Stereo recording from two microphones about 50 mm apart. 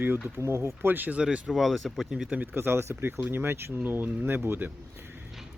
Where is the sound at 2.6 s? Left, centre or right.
Right.